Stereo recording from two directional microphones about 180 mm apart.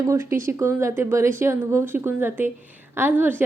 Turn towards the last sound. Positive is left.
turn(degrees=-10)  # may be behind; listen again after turning